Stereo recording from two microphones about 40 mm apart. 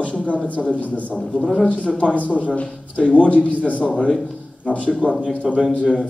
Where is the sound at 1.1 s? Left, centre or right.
Centre.